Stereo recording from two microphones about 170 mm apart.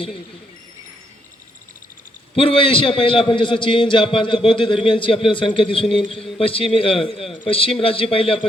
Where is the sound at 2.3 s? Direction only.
30° left (ahead or behind).